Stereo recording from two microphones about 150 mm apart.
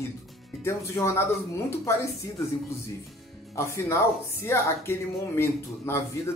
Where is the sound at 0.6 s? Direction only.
20° left (ahead or behind).